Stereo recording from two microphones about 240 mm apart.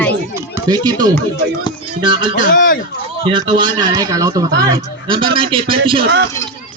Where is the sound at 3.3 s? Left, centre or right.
Centre.